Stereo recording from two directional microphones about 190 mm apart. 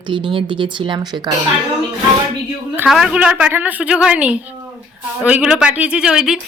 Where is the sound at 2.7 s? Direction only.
5° right (ahead or behind).